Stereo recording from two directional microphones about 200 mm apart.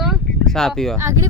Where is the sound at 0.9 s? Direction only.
15° right (ahead or behind).